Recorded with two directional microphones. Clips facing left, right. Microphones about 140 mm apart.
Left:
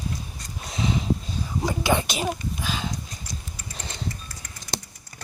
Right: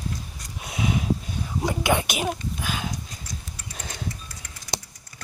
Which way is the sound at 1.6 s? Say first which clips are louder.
Even; 10° right (ahead or behind).